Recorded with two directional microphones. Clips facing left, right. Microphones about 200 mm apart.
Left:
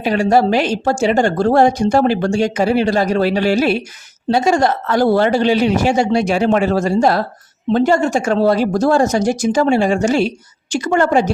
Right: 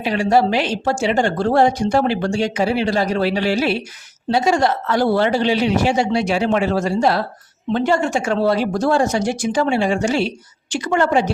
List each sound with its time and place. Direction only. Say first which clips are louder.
0.0 s a woman's voice: left 3 dB; 45° left (ahead or behind)